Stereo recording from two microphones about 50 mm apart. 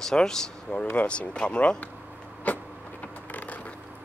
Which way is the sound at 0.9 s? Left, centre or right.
Left.